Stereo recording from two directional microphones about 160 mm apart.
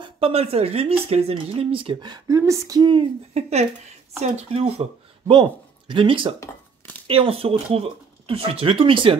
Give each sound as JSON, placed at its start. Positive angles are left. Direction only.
{"t": 0.0, "sound": "speech", "side_deg": -35}